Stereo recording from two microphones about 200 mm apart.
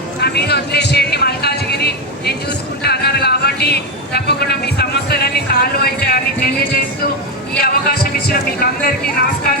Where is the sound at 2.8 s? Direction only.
55° left (ahead or behind).